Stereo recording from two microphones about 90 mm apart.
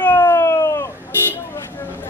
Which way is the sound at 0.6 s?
35° left (ahead or behind).